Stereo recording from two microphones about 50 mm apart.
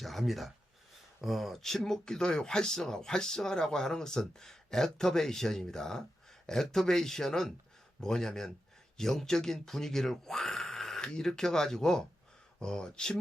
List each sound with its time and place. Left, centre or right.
0.0 s speech: centre